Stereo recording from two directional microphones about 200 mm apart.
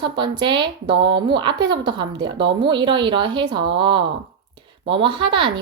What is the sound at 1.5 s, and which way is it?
Speech, 60° right (ahead or behind).